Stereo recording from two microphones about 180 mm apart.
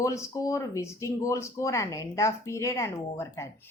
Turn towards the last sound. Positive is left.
turn(degrees=15)  # may be behind; listen again after turning